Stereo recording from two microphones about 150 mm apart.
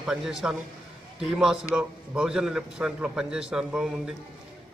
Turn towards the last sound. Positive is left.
turn(degrees=-5)  # may be behind; listen again after turning